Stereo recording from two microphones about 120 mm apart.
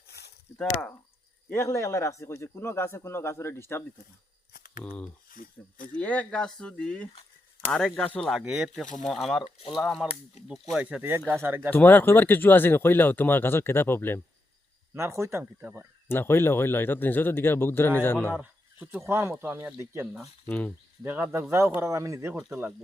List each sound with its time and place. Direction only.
0.6 s speech: 5° left (ahead or behind)
1.5 s speech: 20° left (ahead or behind)
4.8 s speech: 10° left (ahead or behind)
8.3 s speech: 5° right (ahead or behind)
9.4 s speech: 50° left (ahead or behind)
9.7 s speech: centre (ahead or behind); by 11.7 s 20° right (ahead or behind)
11.7 s speech: 15° left (ahead or behind)
14.9 s speech: 25° right (ahead or behind)
16.0 s speech: 20° left (ahead or behind)
18.3 s a sound: 15° right (ahead or behind)
19.0 s speech: 20° right (ahead or behind)
20.5 s speech: 10° left (ahead or behind)
21.0 s speech: 15° right (ahead or behind)